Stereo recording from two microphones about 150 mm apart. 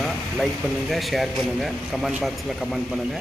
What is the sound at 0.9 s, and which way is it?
A man's voice, centre (ahead or behind).